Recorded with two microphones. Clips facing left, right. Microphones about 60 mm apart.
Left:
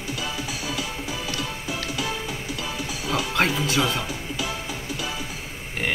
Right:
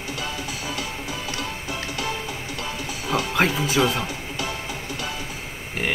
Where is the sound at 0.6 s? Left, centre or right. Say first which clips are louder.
Even; right.